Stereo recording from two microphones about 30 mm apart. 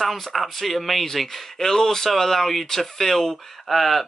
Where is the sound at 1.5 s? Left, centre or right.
Centre.